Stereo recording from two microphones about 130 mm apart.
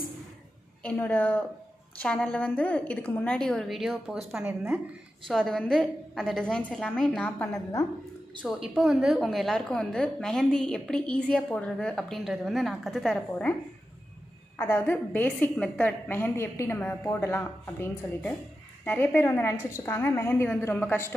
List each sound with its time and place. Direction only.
0.8 s a woman's voice: 10° left (ahead or behind); by 4.7 s 10° right (ahead or behind)
5.3 s a woman's voice: 5° left (ahead or behind)
8.5 s a woman's voice: centre (ahead or behind)
14.6 s a woman's voice: 15° left (ahead or behind)